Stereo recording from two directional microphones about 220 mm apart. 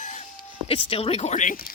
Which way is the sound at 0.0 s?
35° left (ahead or behind).